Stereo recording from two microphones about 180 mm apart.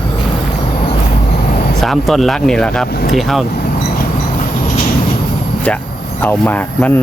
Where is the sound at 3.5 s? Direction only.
60° left (ahead or behind).